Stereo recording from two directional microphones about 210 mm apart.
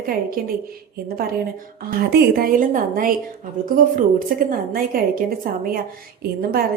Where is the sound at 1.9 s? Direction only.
45° right (ahead or behind).